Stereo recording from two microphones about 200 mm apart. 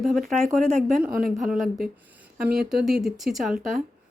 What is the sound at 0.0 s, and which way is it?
Speech, centre (ahead or behind).